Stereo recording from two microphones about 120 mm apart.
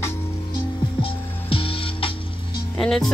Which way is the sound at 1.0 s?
50° left (ahead or behind).